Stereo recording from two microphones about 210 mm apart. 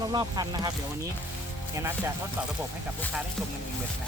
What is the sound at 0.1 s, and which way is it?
Speech, 20° right (ahead or behind).